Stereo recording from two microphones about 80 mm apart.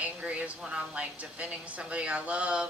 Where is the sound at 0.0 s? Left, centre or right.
Centre.